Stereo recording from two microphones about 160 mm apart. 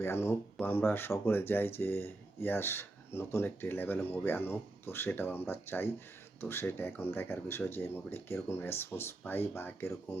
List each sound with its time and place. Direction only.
0.0 s speech: 15° left (ahead or behind)